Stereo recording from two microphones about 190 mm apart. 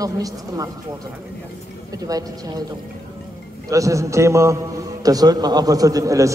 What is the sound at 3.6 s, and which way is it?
A man's voice, 15° right (ahead or behind).